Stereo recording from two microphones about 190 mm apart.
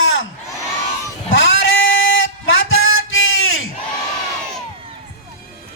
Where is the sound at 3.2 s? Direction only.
90° left.